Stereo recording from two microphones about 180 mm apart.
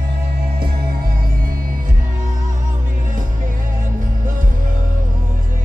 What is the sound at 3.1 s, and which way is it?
Music, 50° right (ahead or behind).